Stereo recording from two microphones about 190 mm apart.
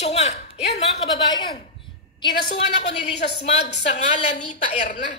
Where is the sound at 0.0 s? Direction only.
35° left (ahead or behind).